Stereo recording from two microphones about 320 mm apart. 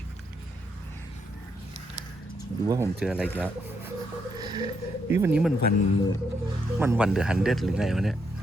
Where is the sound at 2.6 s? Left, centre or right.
Centre.